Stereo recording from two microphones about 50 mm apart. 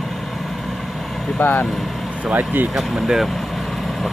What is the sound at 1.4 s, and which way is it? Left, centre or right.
Speech, left.